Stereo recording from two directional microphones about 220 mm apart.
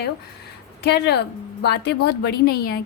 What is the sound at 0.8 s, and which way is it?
Speech, 50° left (ahead or behind).